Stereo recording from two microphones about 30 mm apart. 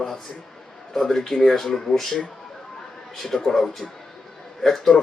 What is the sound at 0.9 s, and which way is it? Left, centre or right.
Speech, centre.